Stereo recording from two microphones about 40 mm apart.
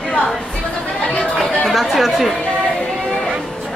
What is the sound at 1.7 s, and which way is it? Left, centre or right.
Speech, centre.